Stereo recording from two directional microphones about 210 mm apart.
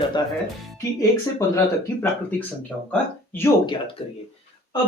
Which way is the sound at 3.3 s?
10° left (ahead or behind).